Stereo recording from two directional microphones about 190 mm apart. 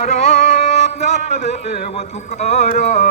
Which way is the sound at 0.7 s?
35° left (ahead or behind).